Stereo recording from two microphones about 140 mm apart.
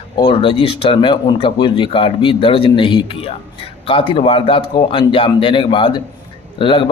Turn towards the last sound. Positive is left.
turn(degrees=35)  # may be behind; listen again after turning